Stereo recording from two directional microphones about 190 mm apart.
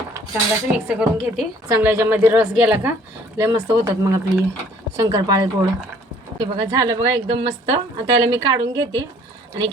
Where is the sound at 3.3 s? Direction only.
20° right (ahead or behind).